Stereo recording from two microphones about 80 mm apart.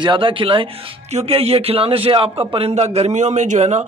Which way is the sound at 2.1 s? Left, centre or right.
Right.